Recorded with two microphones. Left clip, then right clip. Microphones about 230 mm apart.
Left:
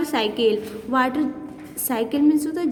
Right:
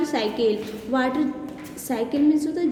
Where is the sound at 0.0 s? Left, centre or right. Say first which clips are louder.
Left 2 dB; left.